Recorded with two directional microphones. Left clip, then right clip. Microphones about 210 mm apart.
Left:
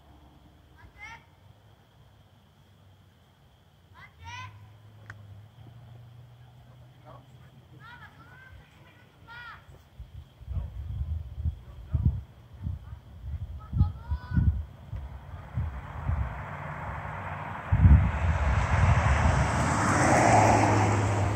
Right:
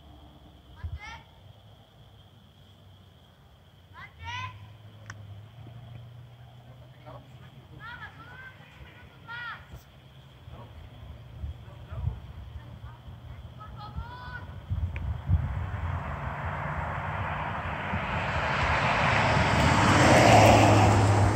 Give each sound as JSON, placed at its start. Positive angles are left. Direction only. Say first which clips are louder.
{"t": 1.0, "sound": "a sound", "louder": "right 1 dB", "side_deg": 50}
{"t": 3.9, "sound": "children playing", "louder": "right 5 dB", "side_deg": 50}
{"t": 15.9, "sound": "vehicle", "louder": "right 4 dB", "side_deg": 5}